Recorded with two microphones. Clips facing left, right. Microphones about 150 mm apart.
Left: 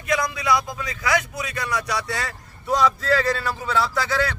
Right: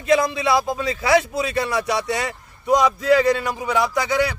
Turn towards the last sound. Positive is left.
turn(degrees=-15)  # may be behind; listen again after turning